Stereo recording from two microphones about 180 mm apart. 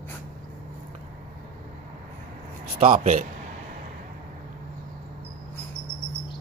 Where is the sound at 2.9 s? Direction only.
40° right (ahead or behind).